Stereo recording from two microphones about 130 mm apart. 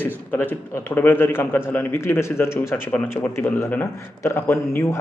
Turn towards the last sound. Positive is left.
turn(degrees=20)  # may be behind; listen again after turning